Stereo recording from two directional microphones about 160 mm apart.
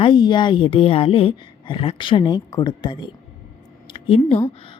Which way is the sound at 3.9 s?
35° left (ahead or behind).